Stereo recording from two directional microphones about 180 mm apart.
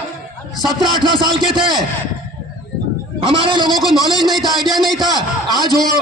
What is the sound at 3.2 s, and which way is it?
Speech, 30° right (ahead or behind).